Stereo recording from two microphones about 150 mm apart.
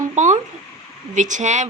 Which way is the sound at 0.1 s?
50° right (ahead or behind).